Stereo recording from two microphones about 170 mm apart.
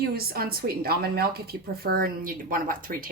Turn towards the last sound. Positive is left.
turn(degrees=-55)  # may be behind; listen again after turning